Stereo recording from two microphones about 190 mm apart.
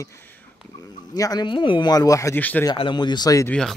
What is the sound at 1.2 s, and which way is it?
A man's voice, 20° left (ahead or behind).